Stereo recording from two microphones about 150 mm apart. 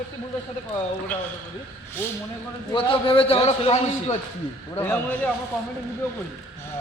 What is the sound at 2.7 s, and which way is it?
A man's voice, 35° left (ahead or behind).